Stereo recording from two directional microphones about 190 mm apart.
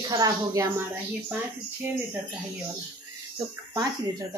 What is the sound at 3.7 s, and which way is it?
Speech, 20° right (ahead or behind).